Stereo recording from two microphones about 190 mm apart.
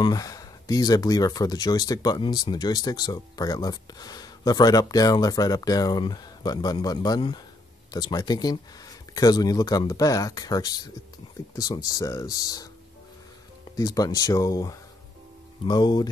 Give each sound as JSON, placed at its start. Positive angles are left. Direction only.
{"t": 0.0, "sound": "speech", "side_deg": 20}
{"t": 13.7, "sound": "speech", "side_deg": 20}